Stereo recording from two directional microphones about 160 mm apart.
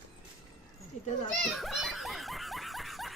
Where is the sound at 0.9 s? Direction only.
50° left (ahead or behind).